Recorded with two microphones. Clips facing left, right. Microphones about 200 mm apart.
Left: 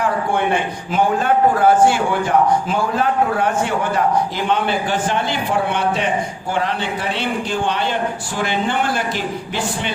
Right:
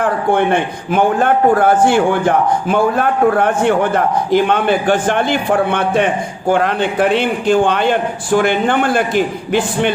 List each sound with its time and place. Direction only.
0.9 s a man's voice: 55° right (ahead or behind)